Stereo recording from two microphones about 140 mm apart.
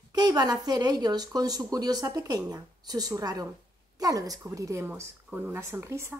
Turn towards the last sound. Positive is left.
turn(degrees=-20)  # may be behind; listen again after turning